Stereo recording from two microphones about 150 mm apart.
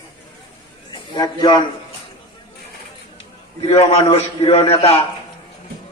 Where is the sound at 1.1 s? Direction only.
30° left (ahead or behind).